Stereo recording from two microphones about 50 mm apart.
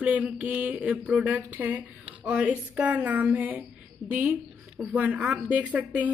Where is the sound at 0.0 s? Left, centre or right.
Right.